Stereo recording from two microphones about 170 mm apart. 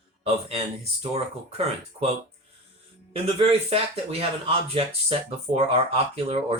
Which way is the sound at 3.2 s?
35° right (ahead or behind).